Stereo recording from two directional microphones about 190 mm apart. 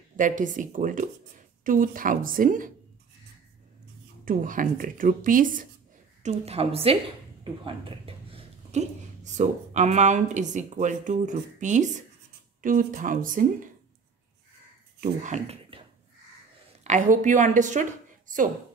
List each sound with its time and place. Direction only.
0.2 s speech: 45° right (ahead or behind)
4.2 s speech: 45° right (ahead or behind)
6.2 s a woman's voice: 35° right (ahead or behind)
15.0 s speech: 40° right (ahead or behind)
16.8 s a woman's voice: 40° right (ahead or behind)